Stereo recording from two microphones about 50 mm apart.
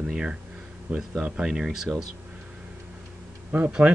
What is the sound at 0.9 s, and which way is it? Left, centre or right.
Speech, right.